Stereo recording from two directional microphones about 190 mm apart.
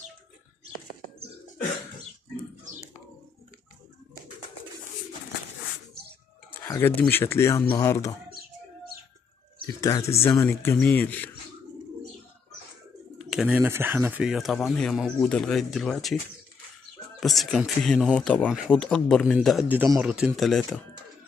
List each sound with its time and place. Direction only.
6.7 s speech: 10° left (ahead or behind)
8.3 s bird: 50° right (ahead or behind)
9.8 s speech: 20° left (ahead or behind)
13.2 s speech: centre (ahead or behind)
17.2 s speech: centre (ahead or behind)